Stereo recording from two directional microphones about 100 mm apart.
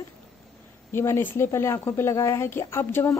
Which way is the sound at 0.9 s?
25° left (ahead or behind).